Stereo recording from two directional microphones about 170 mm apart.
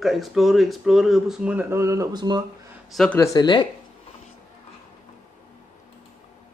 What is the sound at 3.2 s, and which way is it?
Speech, 25° left (ahead or behind).